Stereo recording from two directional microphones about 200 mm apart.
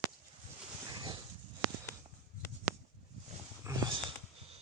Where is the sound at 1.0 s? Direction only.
20° right (ahead or behind).